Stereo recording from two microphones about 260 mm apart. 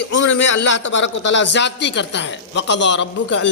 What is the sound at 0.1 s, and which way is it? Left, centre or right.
A man's voice, left.